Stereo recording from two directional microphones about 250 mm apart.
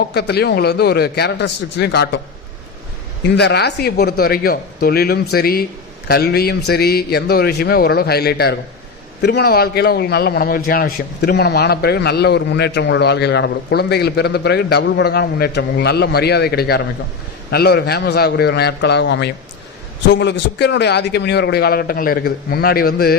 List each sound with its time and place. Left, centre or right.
0.1 s speech: left
3.3 s speech: left
20.6 s speech: left